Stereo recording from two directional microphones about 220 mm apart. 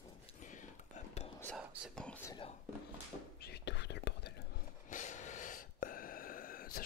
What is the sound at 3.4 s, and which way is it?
Whispering, 50° left (ahead or behind).